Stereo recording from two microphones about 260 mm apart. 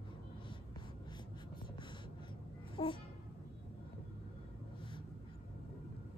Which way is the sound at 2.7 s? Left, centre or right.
Centre.